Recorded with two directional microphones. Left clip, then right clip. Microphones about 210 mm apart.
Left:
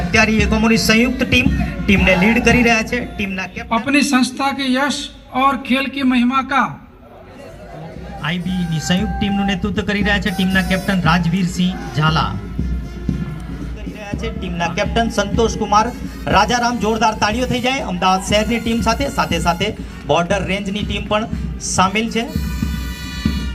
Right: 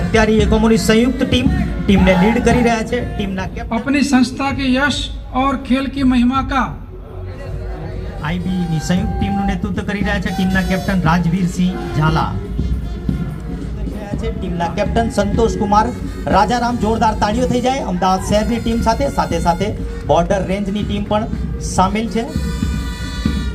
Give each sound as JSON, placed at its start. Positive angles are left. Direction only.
{"t": 0.1, "sound": "speech", "side_deg": -50}
{"t": 3.7, "sound": "a man's voice", "side_deg": 15}
{"t": 8.9, "sound": "speech", "side_deg": -35}
{"t": 14.1, "sound": "speech", "side_deg": -50}